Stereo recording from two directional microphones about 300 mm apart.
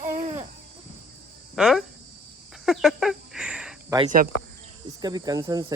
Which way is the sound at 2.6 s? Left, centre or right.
Centre.